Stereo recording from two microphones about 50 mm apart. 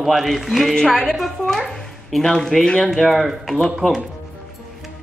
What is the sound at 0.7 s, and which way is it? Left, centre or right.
Speech, centre.